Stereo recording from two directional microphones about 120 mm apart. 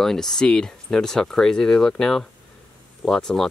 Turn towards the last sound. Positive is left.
turn(degrees=5)  # may be behind; listen again after turning